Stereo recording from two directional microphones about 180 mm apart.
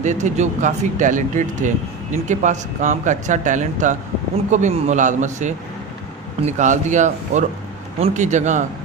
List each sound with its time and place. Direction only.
0.0 s speech: 40° right (ahead or behind)